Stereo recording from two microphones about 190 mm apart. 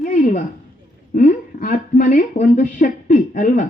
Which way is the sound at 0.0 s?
40° left (ahead or behind).